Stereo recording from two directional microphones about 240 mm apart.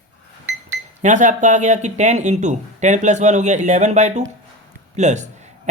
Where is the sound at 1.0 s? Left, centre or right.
Right.